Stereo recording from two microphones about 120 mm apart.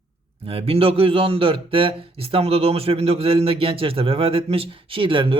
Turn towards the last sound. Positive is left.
turn(degrees=-45)  # may be behind; listen again after turning